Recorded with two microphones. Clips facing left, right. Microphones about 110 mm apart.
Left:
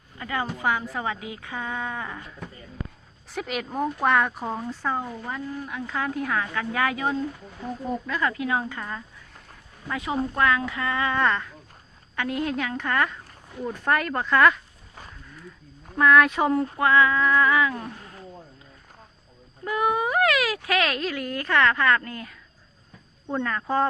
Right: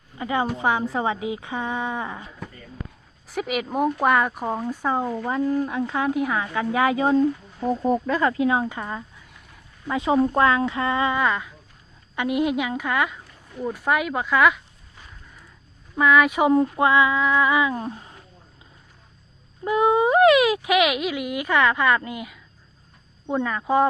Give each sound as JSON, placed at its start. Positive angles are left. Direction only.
{"t": 0.2, "sound": "a woman's voice", "side_deg": -20}
{"t": 3.2, "sound": "speech", "side_deg": -5}
{"t": 4.4, "sound": "speech", "side_deg": -15}
{"t": 5.0, "sound": "a woman's voice", "side_deg": -35}
{"t": 11.2, "sound": "speech", "side_deg": -10}
{"t": 16.0, "sound": "speech", "side_deg": -5}
{"t": 19.6, "sound": "speech", "side_deg": -20}